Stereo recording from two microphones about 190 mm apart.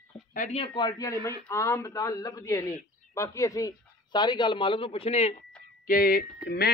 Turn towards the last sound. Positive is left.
turn(degrees=55)  # may be behind; listen again after turning